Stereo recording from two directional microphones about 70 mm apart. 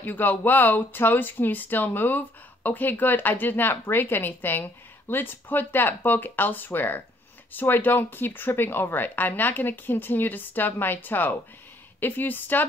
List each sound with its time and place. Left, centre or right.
0.0 s speech: left